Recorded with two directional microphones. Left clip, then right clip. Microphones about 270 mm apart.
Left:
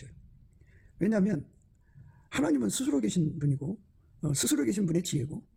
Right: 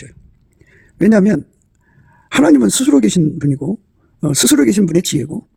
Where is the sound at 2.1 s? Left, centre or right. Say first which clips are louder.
Right 18 dB; right.